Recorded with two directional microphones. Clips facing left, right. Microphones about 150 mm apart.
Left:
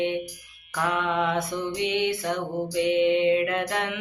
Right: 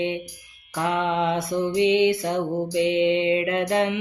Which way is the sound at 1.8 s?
25° right (ahead or behind).